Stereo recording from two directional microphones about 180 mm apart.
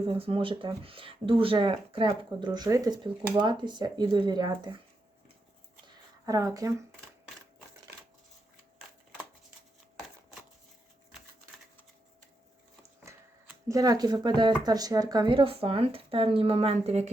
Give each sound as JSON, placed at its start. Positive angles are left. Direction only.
{"t": 0.0, "sound": "speech", "side_deg": -30}
{"t": 6.2, "sound": "speech", "side_deg": -20}
{"t": 13.1, "sound": "a sound", "side_deg": -15}
{"t": 14.6, "sound": "speech", "side_deg": -20}